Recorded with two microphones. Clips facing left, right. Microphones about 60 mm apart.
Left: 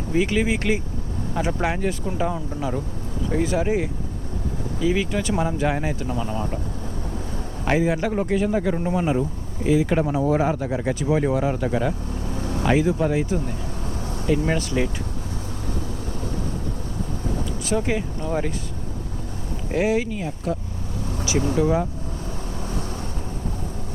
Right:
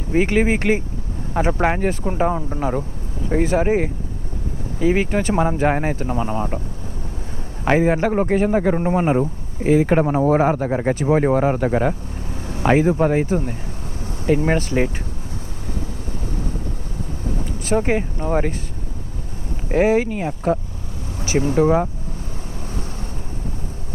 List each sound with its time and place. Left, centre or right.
0.1 s speech: right
7.6 s speech: right
17.7 s speech: right
19.7 s speech: right
22.6 s vehicle: left